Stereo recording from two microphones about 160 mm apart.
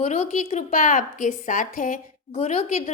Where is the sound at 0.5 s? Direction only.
55° left (ahead or behind).